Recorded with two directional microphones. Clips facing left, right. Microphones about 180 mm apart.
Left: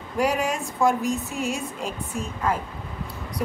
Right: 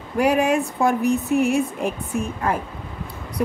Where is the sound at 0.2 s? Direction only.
60° right (ahead or behind).